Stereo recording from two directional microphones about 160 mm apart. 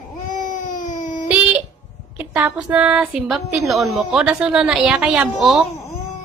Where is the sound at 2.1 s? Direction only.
10° right (ahead or behind).